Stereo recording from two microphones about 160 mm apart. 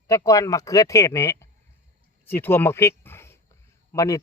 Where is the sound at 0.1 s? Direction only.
20° left (ahead or behind).